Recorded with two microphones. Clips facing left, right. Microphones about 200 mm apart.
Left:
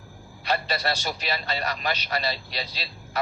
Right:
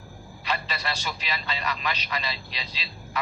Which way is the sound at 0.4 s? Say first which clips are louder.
Left 5 dB; 40° left (ahead or behind).